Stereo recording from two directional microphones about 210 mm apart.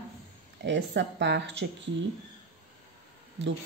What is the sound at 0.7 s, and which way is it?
Speech, 55° right (ahead or behind).